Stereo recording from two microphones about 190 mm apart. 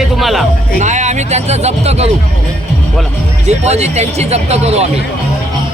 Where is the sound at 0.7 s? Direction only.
40° right (ahead or behind).